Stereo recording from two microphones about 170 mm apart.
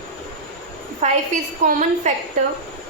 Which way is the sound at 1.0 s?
45° right (ahead or behind).